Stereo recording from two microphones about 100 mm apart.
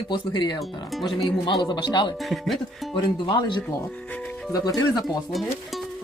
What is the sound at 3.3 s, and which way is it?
Speech, 55° left (ahead or behind).